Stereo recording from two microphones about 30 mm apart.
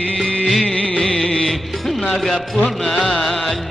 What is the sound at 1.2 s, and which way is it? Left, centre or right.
Music, centre.